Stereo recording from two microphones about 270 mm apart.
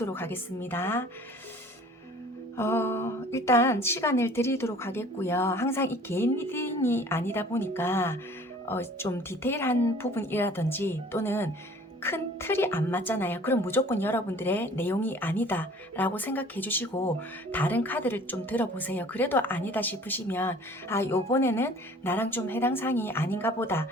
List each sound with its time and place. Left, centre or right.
0.0 s a woman's voice: centre
2.6 s a woman's voice: centre